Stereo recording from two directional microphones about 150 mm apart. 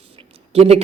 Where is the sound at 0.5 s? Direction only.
45° right (ahead or behind).